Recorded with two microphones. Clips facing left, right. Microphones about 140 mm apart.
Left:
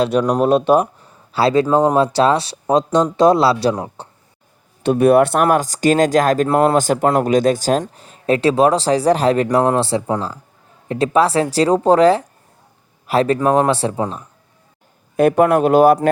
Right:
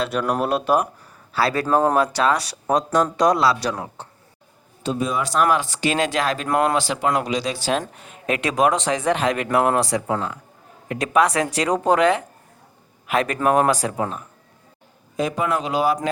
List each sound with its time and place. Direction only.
0.6 s speech: 30° left (ahead or behind)
4.8 s speech: 60° left (ahead or behind); by 6.5 s 45° left (ahead or behind)
6.5 s speech: 30° left (ahead or behind)
6.7 s speech: 45° left (ahead or behind); by 14.1 s 30° left (ahead or behind)
15.1 s a man's voice: 60° left (ahead or behind)